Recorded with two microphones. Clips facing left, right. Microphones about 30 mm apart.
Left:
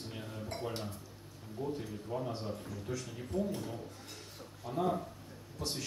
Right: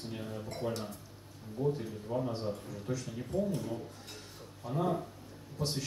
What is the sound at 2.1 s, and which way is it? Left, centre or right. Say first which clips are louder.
Speech: right 4 dB; centre.